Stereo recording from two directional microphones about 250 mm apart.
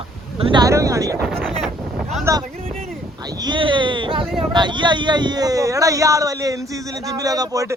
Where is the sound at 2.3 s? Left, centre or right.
Centre.